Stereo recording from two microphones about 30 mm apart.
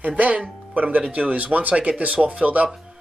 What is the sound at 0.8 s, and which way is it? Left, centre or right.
Speech, right.